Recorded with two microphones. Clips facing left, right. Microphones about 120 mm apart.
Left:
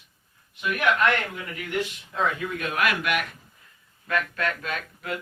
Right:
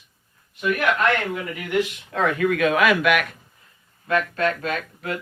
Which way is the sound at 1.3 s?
75° right (ahead or behind).